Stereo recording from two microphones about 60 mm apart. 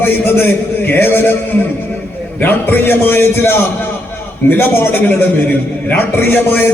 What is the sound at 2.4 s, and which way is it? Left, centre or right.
A man's voice, left.